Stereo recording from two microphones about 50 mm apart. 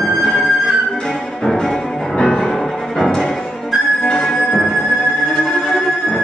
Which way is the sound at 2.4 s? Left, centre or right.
Centre.